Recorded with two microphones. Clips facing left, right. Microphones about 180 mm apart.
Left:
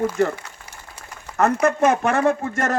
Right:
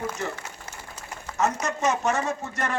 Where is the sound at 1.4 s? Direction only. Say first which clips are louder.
Left 8 dB; 60° left (ahead or behind).